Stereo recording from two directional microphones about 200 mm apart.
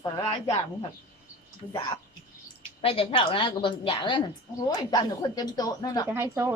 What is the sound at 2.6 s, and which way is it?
A woman's voice, 30° left (ahead or behind).